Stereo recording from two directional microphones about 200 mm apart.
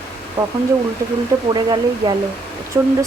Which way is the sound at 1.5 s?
20° right (ahead or behind).